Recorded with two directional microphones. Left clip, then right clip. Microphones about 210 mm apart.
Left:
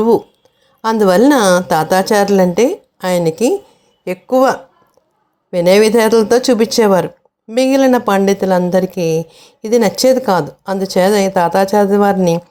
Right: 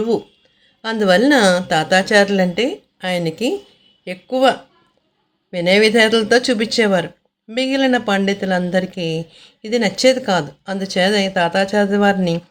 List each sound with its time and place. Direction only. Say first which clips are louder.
0.8 s speech: left 4 dB; 25° left (ahead or behind)
5.5 s a man's voice: left 4 dB; 25° left (ahead or behind)